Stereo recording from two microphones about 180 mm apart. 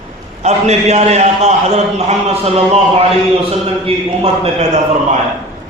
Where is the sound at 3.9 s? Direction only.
30° right (ahead or behind).